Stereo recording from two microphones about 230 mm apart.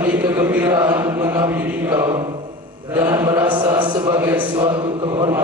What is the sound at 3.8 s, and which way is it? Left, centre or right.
Chant, centre.